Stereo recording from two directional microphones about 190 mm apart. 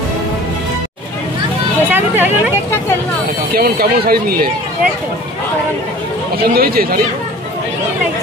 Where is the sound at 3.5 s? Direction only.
50° right (ahead or behind).